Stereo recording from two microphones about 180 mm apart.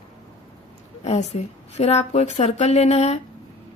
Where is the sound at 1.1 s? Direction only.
35° left (ahead or behind).